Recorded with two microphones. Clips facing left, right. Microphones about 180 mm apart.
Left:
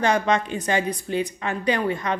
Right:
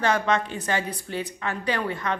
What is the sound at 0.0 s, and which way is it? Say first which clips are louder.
A woman's voice: left 2 dB; 15° left (ahead or behind).